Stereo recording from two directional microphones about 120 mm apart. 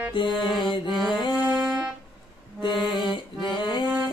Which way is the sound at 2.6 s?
40° left (ahead or behind).